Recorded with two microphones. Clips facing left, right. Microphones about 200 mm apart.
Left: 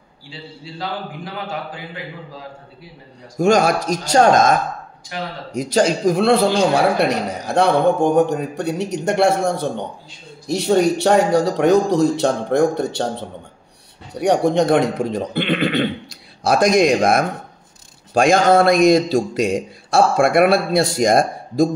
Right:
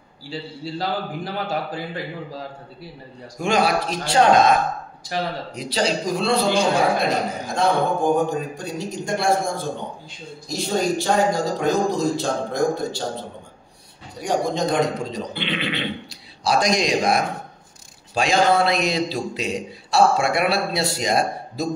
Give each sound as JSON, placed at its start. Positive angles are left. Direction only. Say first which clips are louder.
{"t": 0.3, "sound": "a man's voice", "louder": "right 5 dB", "side_deg": -40}
{"t": 3.3, "sound": "a man's voice", "louder": "left 5 dB", "side_deg": 45}
{"t": 7.0, "sound": "a man's voice", "louder": "left 3 dB", "side_deg": 70}
{"t": 14.1, "sound": "a man's voice", "louder": "left 7 dB", "side_deg": 65}